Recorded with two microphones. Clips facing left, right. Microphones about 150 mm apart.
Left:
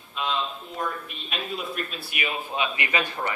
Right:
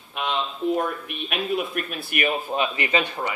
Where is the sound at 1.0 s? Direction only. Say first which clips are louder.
Right 6 dB; 60° right (ahead or behind).